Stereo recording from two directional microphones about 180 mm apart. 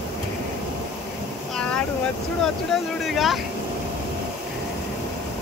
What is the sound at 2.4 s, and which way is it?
Speech, centre (ahead or behind).